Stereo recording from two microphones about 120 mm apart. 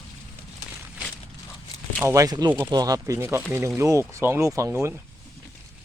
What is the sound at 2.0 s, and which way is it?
Speech, 30° right (ahead or behind).